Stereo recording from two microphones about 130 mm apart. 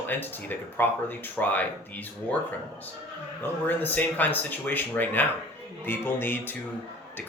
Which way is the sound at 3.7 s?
15° left (ahead or behind).